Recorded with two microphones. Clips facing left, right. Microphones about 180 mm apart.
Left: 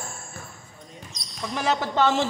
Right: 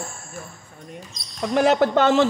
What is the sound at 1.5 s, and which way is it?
Speech, 60° right (ahead or behind).